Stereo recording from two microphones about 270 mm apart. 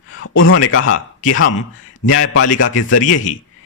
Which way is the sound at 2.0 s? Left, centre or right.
Left.